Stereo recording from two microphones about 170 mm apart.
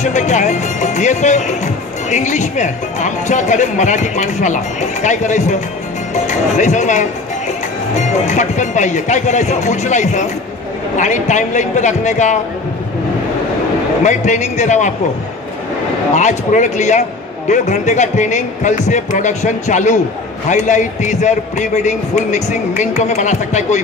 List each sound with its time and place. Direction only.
0.0 s a man's voice: 45° left (ahead or behind)
8.3 s a man's voice: 45° left (ahead or behind)
14.0 s a man's voice: 45° left (ahead or behind)
16.2 s a man's voice: 45° left (ahead or behind)